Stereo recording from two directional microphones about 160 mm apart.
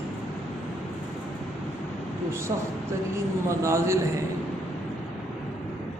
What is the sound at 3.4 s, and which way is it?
Speech, 20° right (ahead or behind).